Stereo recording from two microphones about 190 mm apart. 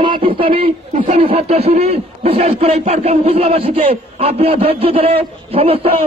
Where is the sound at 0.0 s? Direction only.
30° right (ahead or behind).